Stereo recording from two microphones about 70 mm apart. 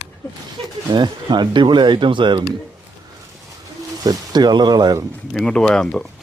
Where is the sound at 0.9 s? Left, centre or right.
Right.